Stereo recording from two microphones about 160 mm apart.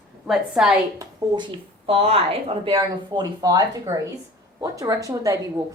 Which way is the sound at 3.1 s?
25° right (ahead or behind).